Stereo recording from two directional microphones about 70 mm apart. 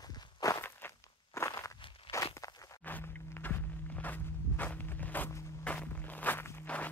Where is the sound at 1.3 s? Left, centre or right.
Left.